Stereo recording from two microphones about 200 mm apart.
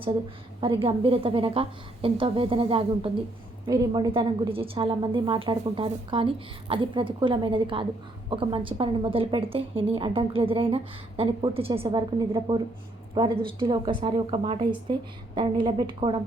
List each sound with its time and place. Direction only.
0.6 s a woman's voice: 25° right (ahead or behind)